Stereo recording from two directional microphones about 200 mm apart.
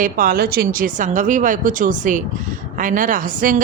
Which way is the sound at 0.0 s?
45° right (ahead or behind).